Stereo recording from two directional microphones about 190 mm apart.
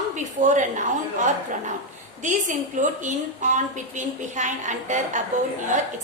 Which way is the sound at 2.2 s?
40° right (ahead or behind).